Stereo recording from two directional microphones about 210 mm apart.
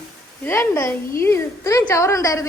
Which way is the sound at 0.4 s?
15° left (ahead or behind).